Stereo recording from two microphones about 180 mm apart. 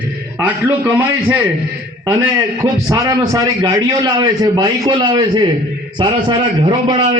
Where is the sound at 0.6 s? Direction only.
15° right (ahead or behind).